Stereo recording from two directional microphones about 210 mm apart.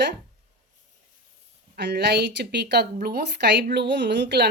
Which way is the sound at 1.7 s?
55° right (ahead or behind).